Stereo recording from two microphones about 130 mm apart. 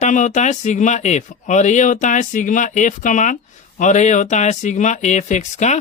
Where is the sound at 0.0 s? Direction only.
70° left (ahead or behind).